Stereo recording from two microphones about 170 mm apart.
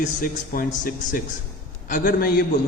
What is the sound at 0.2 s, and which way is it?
Speech, 55° left (ahead or behind).